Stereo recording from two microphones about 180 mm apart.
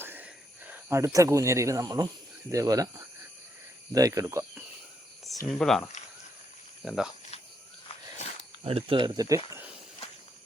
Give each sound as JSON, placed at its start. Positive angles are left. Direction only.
{"t": 0.0, "sound": "a sound", "side_deg": -10}
{"t": 2.5, "sound": "speech", "side_deg": -20}
{"t": 3.9, "sound": "speech", "side_deg": -20}
{"t": 5.5, "sound": "speech", "side_deg": 0}
{"t": 8.6, "sound": "speech", "side_deg": -30}